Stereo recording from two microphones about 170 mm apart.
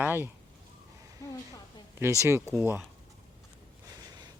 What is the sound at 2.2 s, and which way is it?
Speech, 15° right (ahead or behind).